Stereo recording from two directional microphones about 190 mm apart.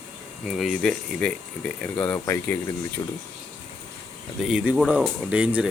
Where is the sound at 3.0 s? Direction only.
20° left (ahead or behind).